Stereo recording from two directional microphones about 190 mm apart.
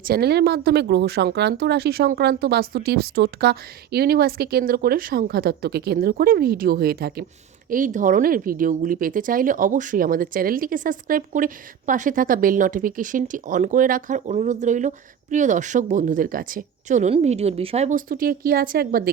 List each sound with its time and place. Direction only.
0.0 s speech: 55° right (ahead or behind)
7.7 s speech: 45° right (ahead or behind)